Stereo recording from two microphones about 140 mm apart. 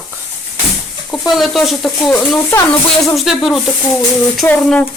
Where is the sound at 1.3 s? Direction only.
Centre (ahead or behind).